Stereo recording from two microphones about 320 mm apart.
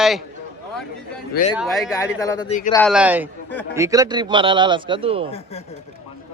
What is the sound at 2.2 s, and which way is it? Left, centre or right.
Speech, centre.